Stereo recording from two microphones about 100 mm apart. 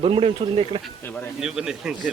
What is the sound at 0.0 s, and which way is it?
Speech, 65° right (ahead or behind).